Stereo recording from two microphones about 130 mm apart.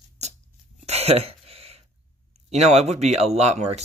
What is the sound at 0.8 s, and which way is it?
Throat clearing, 55° right (ahead or behind).